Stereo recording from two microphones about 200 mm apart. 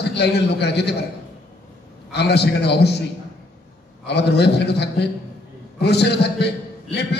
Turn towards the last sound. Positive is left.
turn(degrees=55)  # may be behind; listen again after turning